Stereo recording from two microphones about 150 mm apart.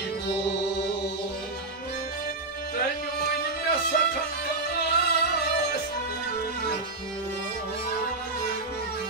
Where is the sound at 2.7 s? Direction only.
90° left.